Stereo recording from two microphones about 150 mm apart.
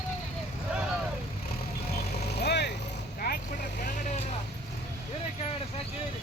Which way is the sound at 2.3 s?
90° left.